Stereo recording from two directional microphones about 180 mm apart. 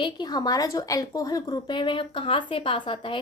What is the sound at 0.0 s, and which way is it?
A woman's voice, 25° left (ahead or behind).